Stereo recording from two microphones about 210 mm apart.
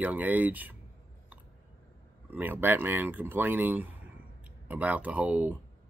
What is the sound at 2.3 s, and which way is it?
Speech, 10° right (ahead or behind).